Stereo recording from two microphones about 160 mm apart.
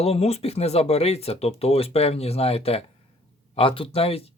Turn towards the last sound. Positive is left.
turn(degrees=35)  # may be behind; listen again after turning